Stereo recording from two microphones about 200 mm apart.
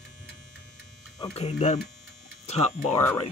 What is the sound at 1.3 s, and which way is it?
Speech, 35° left (ahead or behind).